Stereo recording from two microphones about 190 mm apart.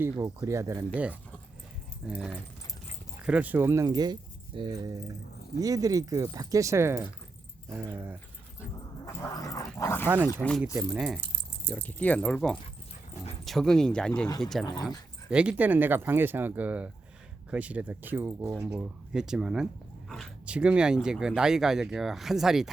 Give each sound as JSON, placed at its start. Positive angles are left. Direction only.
{"t": 0.0, "sound": "speech", "side_deg": -15}
{"t": 2.0, "sound": "speech", "side_deg": 0}
{"t": 9.3, "sound": "speech", "side_deg": 20}
{"t": 11.6, "sound": "speech", "side_deg": 10}
{"t": 14.3, "sound": "speech", "side_deg": 20}
{"t": 14.8, "sound": "speech", "side_deg": -5}